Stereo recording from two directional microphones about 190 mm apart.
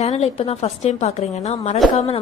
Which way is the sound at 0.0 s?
35° left (ahead or behind).